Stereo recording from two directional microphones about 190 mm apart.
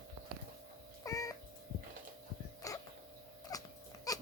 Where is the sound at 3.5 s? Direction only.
20° left (ahead or behind).